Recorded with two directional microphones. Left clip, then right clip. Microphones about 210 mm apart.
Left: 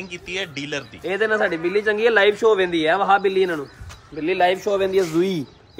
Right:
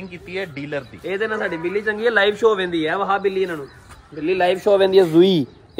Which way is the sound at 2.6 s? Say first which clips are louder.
Left 3 dB; 50° left (ahead or behind).